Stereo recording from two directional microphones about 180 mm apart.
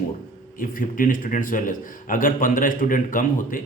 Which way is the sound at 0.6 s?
50° left (ahead or behind).